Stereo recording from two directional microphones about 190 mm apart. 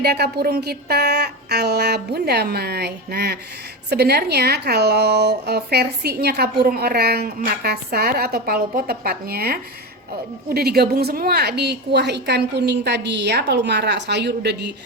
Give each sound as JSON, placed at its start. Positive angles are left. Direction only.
{"t": 0.0, "sound": "speech", "side_deg": -55}